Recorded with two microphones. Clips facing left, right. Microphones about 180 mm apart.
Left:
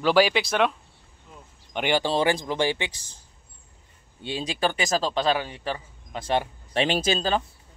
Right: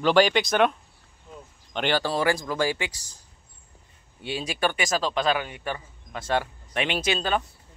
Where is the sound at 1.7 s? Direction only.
15° left (ahead or behind).